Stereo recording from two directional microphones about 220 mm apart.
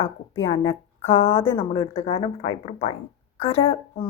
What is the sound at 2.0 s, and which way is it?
A woman's voice, 35° left (ahead or behind).